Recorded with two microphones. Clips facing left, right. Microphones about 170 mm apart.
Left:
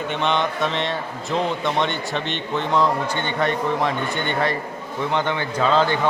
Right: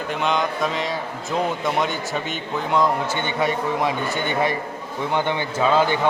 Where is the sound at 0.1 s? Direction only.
Centre (ahead or behind).